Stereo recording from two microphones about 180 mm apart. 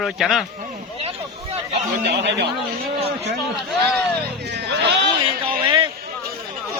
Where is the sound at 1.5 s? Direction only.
35° right (ahead or behind).